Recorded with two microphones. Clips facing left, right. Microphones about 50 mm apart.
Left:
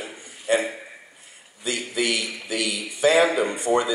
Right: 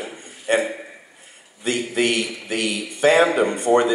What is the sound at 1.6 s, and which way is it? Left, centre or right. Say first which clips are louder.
A man's voice: right 4 dB; right.